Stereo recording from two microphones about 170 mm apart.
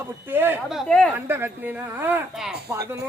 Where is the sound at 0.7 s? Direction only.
Centre (ahead or behind).